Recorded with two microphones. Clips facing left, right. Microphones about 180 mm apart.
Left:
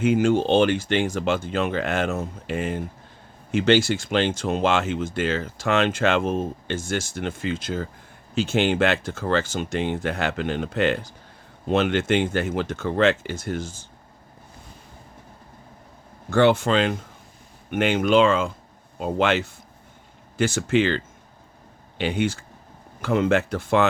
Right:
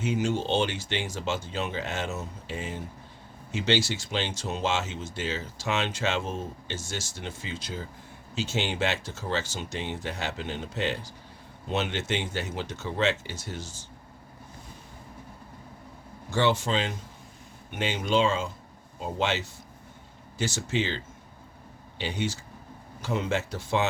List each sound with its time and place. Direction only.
0.0 s speech: 55° left (ahead or behind)
16.3 s speech: 55° left (ahead or behind)